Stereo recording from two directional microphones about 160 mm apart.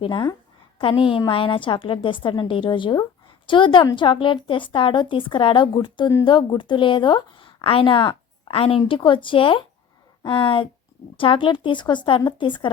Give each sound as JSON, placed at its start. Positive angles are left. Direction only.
{"t": 0.0, "sound": "a woman's voice", "side_deg": 30}
{"t": 6.1, "sound": "a woman's voice", "side_deg": 20}
{"t": 6.3, "sound": "a woman's voice", "side_deg": 30}